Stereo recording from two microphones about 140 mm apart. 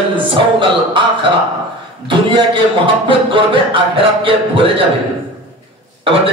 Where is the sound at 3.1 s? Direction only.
40° right (ahead or behind).